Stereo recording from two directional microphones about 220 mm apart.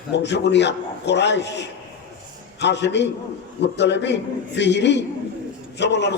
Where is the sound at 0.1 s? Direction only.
50° left (ahead or behind).